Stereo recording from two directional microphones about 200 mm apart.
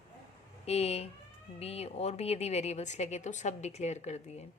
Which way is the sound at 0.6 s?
30° left (ahead or behind).